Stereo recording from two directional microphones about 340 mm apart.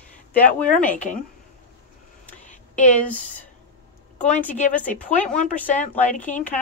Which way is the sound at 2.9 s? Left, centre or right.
Centre.